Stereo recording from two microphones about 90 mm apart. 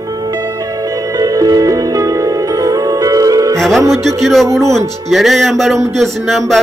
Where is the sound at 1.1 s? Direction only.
40° right (ahead or behind).